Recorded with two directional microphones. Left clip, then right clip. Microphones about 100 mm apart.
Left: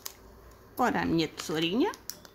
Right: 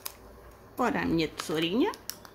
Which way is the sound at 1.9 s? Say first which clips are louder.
Right 1 dB; 10° right (ahead or behind).